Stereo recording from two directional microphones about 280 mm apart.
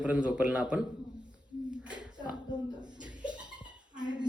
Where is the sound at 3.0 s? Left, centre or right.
Centre.